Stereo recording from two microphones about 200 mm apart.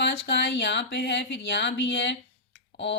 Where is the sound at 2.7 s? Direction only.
60° left (ahead or behind).